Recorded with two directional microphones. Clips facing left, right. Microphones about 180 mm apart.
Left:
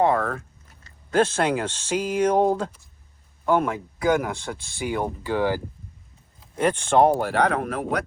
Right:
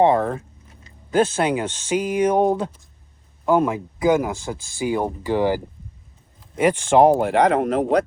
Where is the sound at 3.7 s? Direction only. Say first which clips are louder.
Right 3 dB; 15° right (ahead or behind).